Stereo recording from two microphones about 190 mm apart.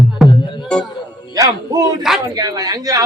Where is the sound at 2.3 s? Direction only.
20° right (ahead or behind).